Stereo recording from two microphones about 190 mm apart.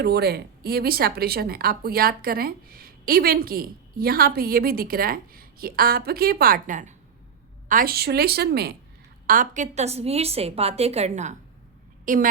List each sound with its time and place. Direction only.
0.0 s a woman's voice: 60° right (ahead or behind)
9.2 s a woman's voice: 45° right (ahead or behind)